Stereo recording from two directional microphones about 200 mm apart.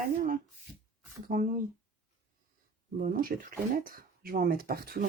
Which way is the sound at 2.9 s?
45° right (ahead or behind).